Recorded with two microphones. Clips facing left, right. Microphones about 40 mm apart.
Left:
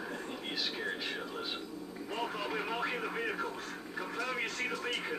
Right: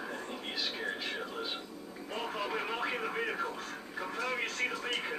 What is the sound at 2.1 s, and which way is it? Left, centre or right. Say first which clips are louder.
Television: right 1 dB; centre.